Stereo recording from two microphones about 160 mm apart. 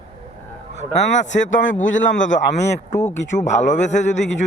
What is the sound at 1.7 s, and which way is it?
A man's voice, 50° left (ahead or behind).